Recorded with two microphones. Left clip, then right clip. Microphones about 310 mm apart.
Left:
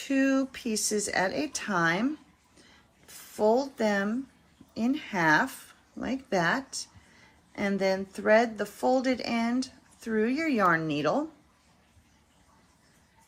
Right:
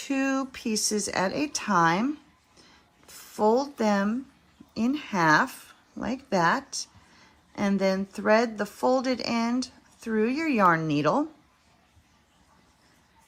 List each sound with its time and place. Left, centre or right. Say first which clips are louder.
0.0 s speech: left 1 dB; centre
2.6 s a sound: right 2 dB; centre
4.7 s speech: right 2 dB; centre